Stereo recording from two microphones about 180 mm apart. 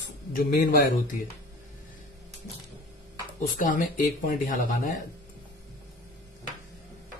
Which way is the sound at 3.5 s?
50° left (ahead or behind).